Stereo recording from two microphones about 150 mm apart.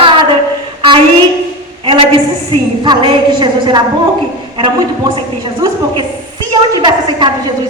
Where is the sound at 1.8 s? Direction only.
35° right (ahead or behind).